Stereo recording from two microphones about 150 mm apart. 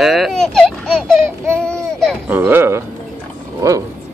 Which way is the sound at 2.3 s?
15° right (ahead or behind).